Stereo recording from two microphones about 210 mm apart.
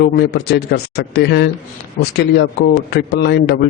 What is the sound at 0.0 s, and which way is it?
A man's voice, 50° left (ahead or behind).